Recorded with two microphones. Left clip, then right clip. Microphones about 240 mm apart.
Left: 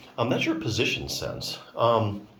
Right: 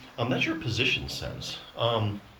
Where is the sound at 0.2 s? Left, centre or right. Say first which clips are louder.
Left 3 dB; centre.